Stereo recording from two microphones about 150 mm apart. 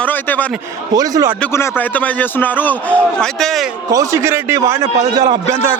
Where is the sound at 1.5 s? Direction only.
10° left (ahead or behind).